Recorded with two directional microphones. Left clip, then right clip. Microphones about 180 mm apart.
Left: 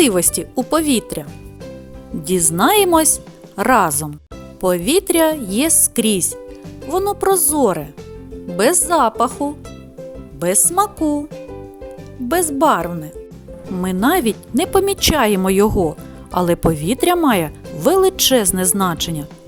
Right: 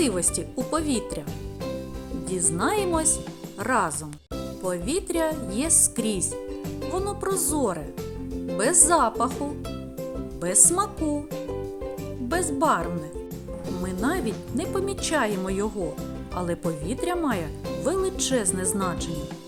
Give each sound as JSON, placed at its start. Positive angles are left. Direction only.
{"t": 0.0, "sound": "speech", "side_deg": 55}
{"t": 2.2, "sound": "speech", "side_deg": 60}
{"t": 12.3, "sound": "speech", "side_deg": 50}